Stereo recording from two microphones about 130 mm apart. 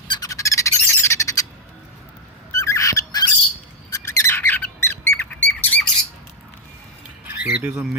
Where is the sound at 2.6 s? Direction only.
25° left (ahead or behind).